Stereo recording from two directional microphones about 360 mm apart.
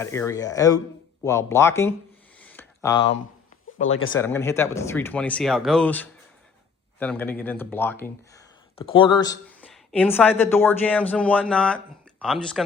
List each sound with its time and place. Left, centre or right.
0.0 s speech: centre
2.4 s a sound: centre
3.9 s speech: left
4.2 s speech: centre